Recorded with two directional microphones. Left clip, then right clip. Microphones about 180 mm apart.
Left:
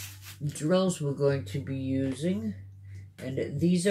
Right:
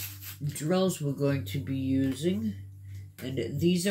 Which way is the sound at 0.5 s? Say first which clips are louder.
Left 2 dB; 35° left (ahead or behind).